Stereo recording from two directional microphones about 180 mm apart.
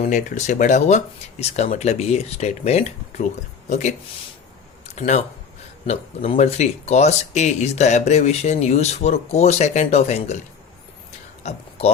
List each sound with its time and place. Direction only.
0.1 s speech: 40° left (ahead or behind)
4.9 s speech: 40° left (ahead or behind)